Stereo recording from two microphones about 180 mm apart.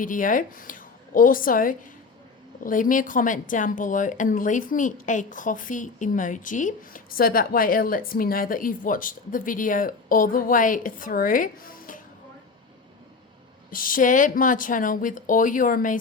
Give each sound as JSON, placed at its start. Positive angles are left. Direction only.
{"t": 0.0, "sound": "a woman's voice", "side_deg": 50}
{"t": 13.7, "sound": "a woman's voice", "side_deg": 50}